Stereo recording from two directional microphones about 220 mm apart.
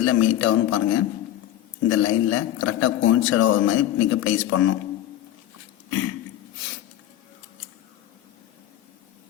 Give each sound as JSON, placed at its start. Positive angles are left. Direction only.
{"t": 0.0, "sound": "a man's voice", "side_deg": 60}